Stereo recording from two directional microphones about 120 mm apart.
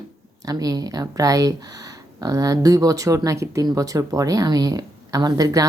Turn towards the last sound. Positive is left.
turn(degrees=-30)  # may be behind; listen again after turning